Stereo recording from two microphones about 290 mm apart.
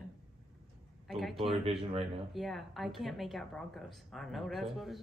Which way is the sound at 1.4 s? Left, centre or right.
Centre.